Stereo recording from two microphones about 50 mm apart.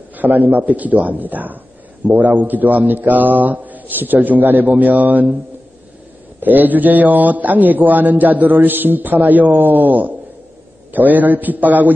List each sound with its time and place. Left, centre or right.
0.1 s a man's voice: right
6.4 s a man's voice: right